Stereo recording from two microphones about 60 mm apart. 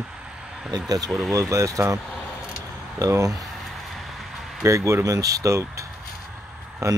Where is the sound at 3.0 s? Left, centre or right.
Right.